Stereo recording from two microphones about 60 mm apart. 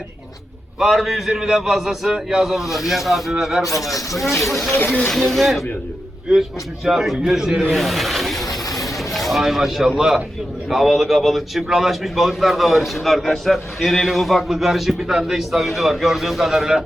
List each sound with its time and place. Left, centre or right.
0.8 s a man's voice: centre
4.7 s speech: left
5.0 s a man's voice: centre
8.4 s a sound: left
9.1 s a man's voice: centre